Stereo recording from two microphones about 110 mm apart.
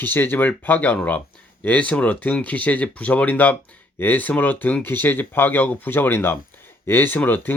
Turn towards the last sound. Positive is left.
turn(degrees=15)  # may be behind; listen again after turning